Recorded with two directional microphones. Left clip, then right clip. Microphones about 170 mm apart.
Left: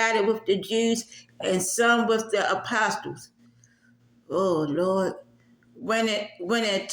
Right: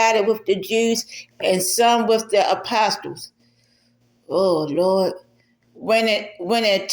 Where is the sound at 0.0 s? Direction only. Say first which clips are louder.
Right 6 dB; 30° left (ahead or behind).